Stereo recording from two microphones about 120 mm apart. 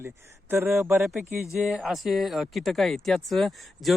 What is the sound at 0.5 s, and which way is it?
Speech, 20° right (ahead or behind).